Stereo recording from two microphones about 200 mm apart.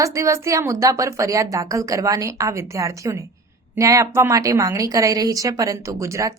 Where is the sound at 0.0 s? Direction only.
15° right (ahead or behind).